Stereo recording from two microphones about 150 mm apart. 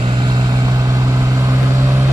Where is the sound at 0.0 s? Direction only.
30° right (ahead or behind).